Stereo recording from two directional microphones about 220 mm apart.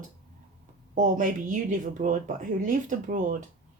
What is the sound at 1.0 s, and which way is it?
Speech, 35° right (ahead or behind).